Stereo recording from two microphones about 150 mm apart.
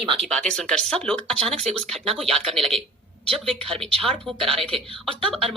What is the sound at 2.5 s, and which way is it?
Speech, centre (ahead or behind).